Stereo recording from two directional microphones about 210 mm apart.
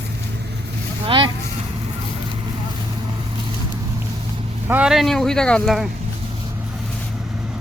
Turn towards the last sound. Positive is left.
turn(degrees=5)  # may be behind; listen again after turning